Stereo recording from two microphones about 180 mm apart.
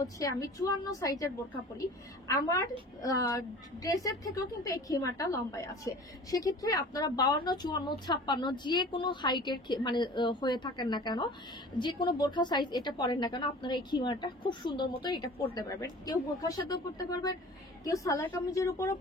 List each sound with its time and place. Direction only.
0.0 s a woman's voice: 20° left (ahead or behind)